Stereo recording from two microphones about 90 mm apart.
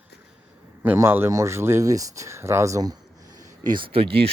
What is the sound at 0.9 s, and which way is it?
Speech, 25° right (ahead or behind).